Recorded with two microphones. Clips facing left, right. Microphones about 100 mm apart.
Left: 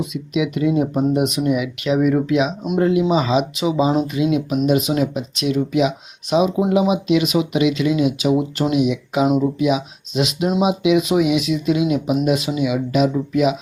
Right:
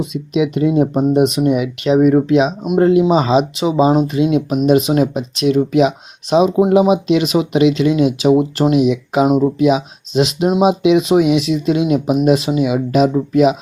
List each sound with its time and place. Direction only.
0.0 s speech: 25° right (ahead or behind)